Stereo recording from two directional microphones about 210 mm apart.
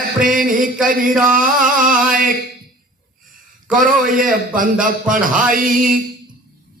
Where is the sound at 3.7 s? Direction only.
40° right (ahead or behind).